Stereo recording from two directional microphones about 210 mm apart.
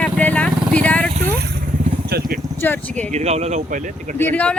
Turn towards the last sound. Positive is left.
turn(degrees=5)  # may be behind; listen again after turning